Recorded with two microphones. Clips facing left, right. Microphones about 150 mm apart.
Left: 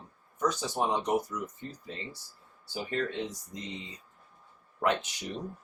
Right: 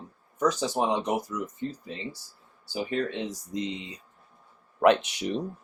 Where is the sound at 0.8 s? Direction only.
90° right.